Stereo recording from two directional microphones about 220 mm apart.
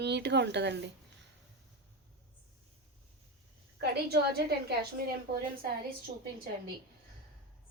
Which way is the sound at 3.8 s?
45° right (ahead or behind).